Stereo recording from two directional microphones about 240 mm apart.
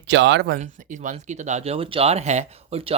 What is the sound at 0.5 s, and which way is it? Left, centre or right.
Speech, right.